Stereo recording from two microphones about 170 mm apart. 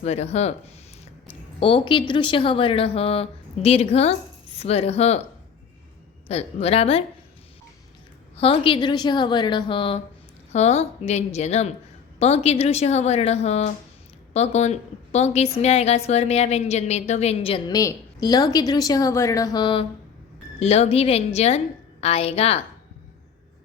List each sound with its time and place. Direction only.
0.0 s a woman's voice: 40° left (ahead or behind)
1.5 s a woman's voice: 30° left (ahead or behind)
6.2 s a woman's voice: 40° left (ahead or behind)
8.4 s a woman's voice: 30° left (ahead or behind)
17.7 s a woman's voice: 20° left (ahead or behind)
20.6 s a woman's voice: 40° left (ahead or behind)